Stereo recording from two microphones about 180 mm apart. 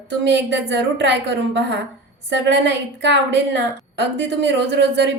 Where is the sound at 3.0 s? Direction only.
80° right.